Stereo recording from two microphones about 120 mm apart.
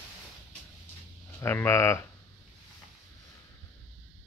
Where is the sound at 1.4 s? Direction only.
20° left (ahead or behind).